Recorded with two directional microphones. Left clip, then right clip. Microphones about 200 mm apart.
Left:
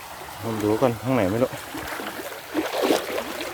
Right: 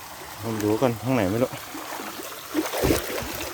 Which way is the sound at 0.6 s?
15° right (ahead or behind).